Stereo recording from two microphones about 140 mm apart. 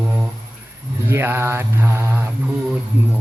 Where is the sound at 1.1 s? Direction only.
15° right (ahead or behind).